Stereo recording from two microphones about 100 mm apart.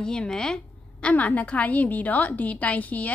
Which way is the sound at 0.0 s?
10° left (ahead or behind).